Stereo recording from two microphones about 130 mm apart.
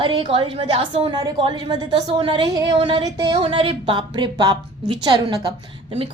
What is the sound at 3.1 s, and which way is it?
A woman's voice, 30° right (ahead or behind).